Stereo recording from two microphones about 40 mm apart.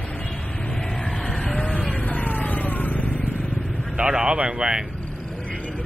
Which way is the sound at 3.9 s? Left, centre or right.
Right.